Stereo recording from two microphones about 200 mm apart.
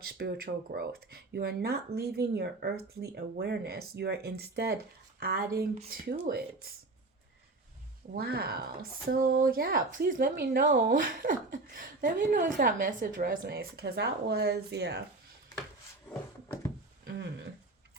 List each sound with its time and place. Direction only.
0.0 s speech: 50° right (ahead or behind)
8.1 s speech: 50° right (ahead or behind)